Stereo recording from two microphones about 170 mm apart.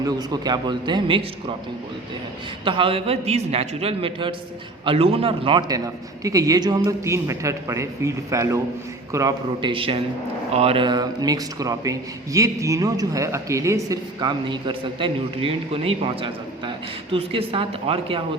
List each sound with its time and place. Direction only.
0.0 s a man's voice: 25° right (ahead or behind)
2.6 s a man's voice: 30° right (ahead or behind)